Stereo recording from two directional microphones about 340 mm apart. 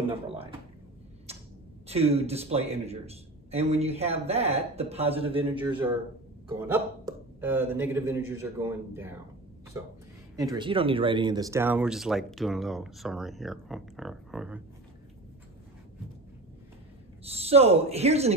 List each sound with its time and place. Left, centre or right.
0.0 s a man's voice: centre
1.9 s a man's voice: centre
5.6 s a man's voice: centre
17.2 s a man's voice: centre